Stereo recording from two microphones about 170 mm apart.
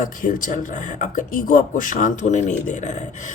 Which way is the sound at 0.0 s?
50° left (ahead or behind).